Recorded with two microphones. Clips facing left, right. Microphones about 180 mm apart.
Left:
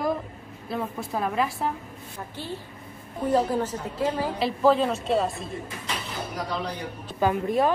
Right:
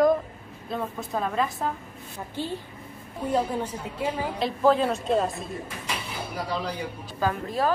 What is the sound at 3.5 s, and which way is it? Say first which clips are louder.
Speech: left 3 dB; 10° right (ahead or behind).